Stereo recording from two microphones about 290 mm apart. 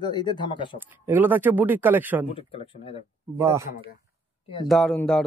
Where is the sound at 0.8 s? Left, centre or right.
Centre.